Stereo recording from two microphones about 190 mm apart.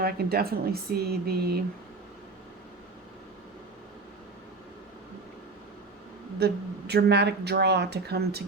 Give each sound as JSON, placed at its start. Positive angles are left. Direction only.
{"t": 0.0, "sound": "speech", "side_deg": -55}
{"t": 6.4, "sound": "speech", "side_deg": -60}